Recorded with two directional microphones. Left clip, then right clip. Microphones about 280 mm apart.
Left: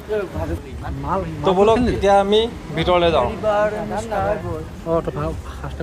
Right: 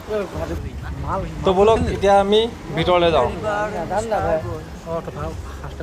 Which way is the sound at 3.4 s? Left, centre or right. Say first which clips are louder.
Left 5 dB; left.